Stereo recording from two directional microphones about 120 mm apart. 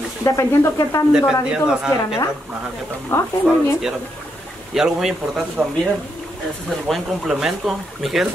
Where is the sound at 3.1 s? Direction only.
20° left (ahead or behind).